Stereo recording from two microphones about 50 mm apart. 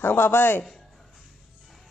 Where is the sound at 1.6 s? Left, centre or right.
Centre.